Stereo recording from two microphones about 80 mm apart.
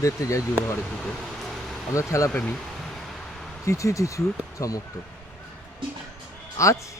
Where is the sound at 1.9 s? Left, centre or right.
Left.